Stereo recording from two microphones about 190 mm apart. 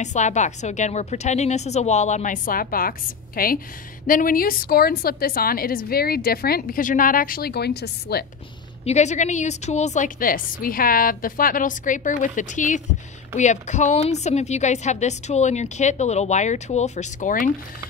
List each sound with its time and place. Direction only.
0.0 s a woman's voice: 40° left (ahead or behind); by 8.3 s 60° left (ahead or behind)
8.8 s a woman's voice: 35° left (ahead or behind)